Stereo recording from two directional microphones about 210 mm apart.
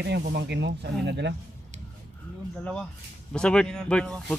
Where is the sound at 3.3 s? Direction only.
5° left (ahead or behind).